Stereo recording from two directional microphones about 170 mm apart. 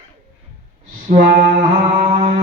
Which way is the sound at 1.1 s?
55° right (ahead or behind).